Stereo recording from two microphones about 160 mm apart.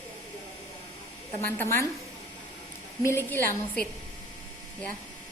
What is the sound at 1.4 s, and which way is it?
Speech, 15° left (ahead or behind).